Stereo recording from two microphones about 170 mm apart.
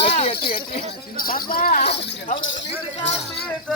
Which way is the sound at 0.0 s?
30° left (ahead or behind).